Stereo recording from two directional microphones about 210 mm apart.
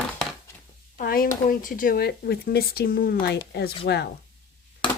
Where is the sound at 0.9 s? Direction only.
45° left (ahead or behind).